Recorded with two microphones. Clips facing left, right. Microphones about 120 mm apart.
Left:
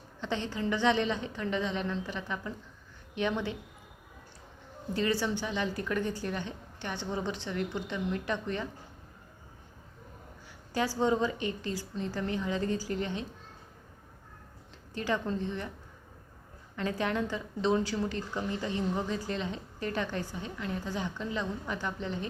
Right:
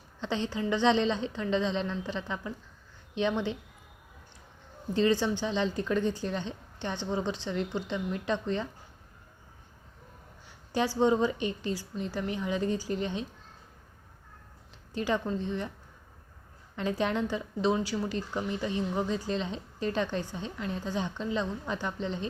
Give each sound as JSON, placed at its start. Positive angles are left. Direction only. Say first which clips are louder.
{"t": 0.2, "sound": "a woman's voice", "louder": "right 2 dB", "side_deg": -20}
{"t": 4.9, "sound": "a woman's voice", "louder": "right 4 dB", "side_deg": -20}
{"t": 10.7, "sound": "a woman's voice", "louder": "right 3 dB", "side_deg": -15}
{"t": 14.9, "sound": "a woman's voice", "louder": "right 2 dB", "side_deg": -20}
{"t": 16.7, "sound": "a woman's voice", "louder": "right 2 dB", "side_deg": -20}